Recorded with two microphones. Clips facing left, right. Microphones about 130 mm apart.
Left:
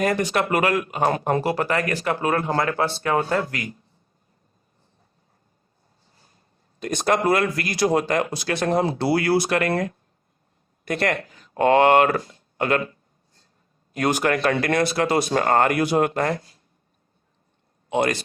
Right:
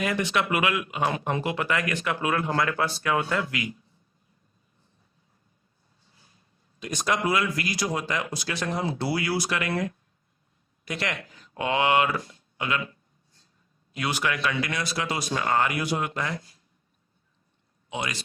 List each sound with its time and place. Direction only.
0.0 s speech: 40° left (ahead or behind)
6.1 s speech: 45° left (ahead or behind)
17.8 s a man's voice: 55° left (ahead or behind)